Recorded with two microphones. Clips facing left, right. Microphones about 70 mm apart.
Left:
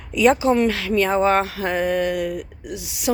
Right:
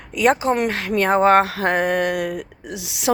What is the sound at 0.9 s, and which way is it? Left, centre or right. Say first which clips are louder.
Speech: right 5 dB; right.